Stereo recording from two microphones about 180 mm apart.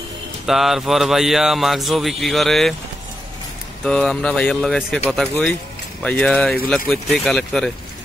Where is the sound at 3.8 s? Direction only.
5° left (ahead or behind).